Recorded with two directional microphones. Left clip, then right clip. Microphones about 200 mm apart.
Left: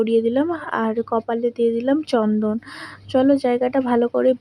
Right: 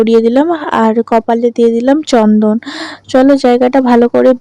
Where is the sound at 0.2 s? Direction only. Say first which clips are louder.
Right 10 dB; 35° right (ahead or behind).